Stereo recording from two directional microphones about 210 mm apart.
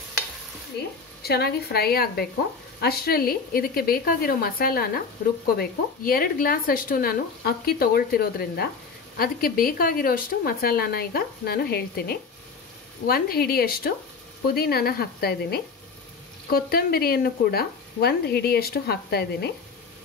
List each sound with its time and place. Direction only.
1.2 s speech: 50° left (ahead or behind)